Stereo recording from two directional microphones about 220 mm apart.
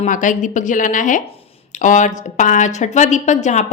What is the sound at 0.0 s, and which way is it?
Speech, 35° left (ahead or behind).